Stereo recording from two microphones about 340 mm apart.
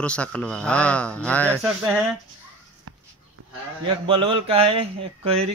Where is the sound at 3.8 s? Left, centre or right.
Centre.